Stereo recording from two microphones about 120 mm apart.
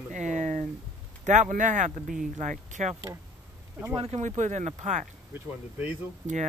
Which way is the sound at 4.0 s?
70° right (ahead or behind).